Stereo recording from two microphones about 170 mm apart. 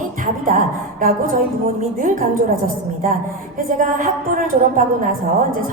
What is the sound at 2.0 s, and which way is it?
Speech, 50° right (ahead or behind).